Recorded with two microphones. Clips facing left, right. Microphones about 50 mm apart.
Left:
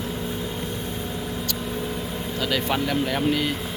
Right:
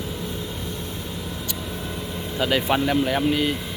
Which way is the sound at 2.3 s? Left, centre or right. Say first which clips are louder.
Right 4 dB; centre.